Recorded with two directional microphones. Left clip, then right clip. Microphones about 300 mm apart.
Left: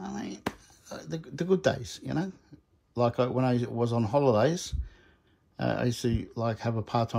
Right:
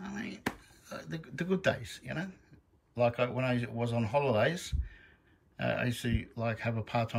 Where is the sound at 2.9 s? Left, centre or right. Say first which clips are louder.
Left 3 dB; centre.